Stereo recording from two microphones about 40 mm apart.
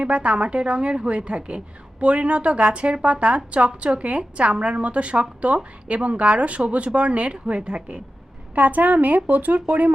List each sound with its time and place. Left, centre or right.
0.0 s a woman's voice: right
8.5 s speech: right